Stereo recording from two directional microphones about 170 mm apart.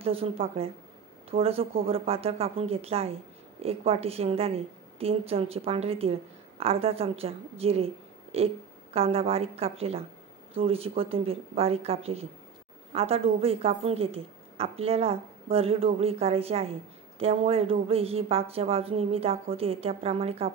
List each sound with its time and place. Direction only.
0.0 s a woman's voice: 35° right (ahead or behind)